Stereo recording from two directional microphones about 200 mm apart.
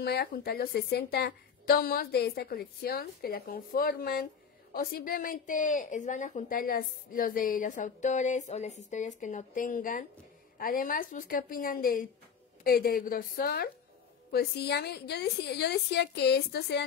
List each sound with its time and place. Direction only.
0.0 s a woman's voice: 50° left (ahead or behind)